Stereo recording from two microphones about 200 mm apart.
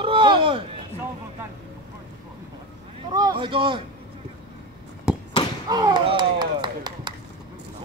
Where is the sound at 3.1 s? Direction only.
20° right (ahead or behind).